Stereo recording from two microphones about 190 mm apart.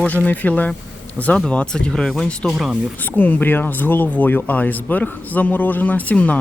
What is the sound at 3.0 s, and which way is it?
Speech, 10° left (ahead or behind).